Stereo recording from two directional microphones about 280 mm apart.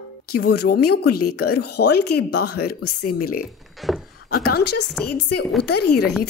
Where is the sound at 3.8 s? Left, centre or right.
Centre.